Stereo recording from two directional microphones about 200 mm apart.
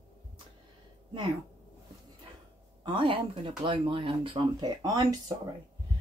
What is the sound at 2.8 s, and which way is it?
Speech, 25° right (ahead or behind).